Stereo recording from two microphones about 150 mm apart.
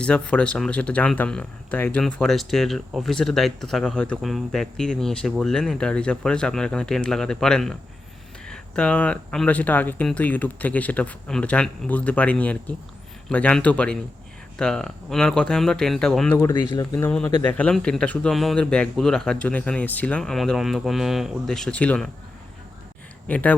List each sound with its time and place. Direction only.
0.0 s speech: 5° left (ahead or behind)
16.6 s speech: 30° left (ahead or behind)
16.9 s speech: 10° left (ahead or behind)
23.3 s speech: 10° left (ahead or behind)